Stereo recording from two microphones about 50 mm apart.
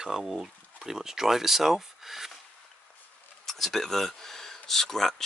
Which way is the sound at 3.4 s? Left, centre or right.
Centre.